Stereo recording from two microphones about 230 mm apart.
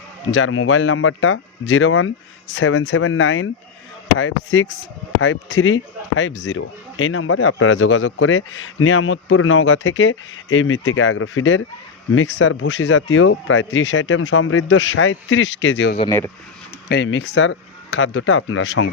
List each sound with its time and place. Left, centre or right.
0.3 s speech: left
16.0 s speech: centre
16.9 s speech: left